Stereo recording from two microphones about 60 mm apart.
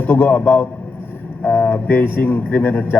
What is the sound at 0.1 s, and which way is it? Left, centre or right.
A man's voice, left.